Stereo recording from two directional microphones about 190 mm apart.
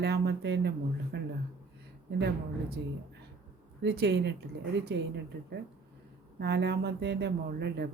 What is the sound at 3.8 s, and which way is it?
A woman's voice, 60° right (ahead or behind).